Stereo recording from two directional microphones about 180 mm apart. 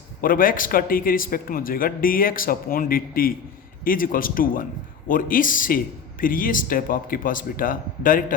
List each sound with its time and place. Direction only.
0.2 s speech: 50° left (ahead or behind)